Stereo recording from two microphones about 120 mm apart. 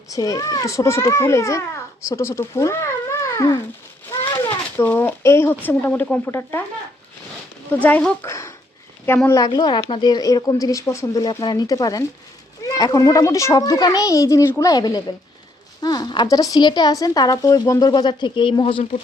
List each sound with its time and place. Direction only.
0.1 s a child's voice: 30° left (ahead or behind)
4.4 s a sound: 20° left (ahead or behind)
5.6 s speech: 15° left (ahead or behind)
7.7 s speech: 15° left (ahead or behind)
8.3 s sniff: 25° left (ahead or behind)
9.2 s a child's voice: 25° left (ahead or behind)
9.5 s a child's voice: 35° left (ahead or behind)